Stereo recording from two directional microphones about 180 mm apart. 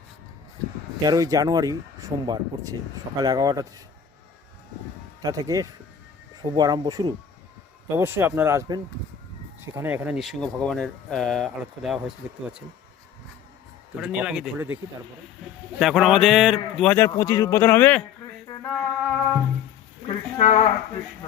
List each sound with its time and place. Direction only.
1.0 s speech: 20° right (ahead or behind)
5.2 s speech: 20° right (ahead or behind); by 12.1 s centre (ahead or behind)
14.0 s speech: 5° right (ahead or behind)
15.8 s speech: centre (ahead or behind)
16.9 s speech: 15° left (ahead or behind)
18.4 s a sound: 20° left (ahead or behind)
18.8 s speech: 10° left (ahead or behind)
20.4 s speech: 40° left (ahead or behind)